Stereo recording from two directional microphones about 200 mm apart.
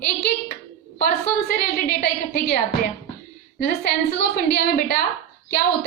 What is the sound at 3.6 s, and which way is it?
A woman's voice, 50° left (ahead or behind).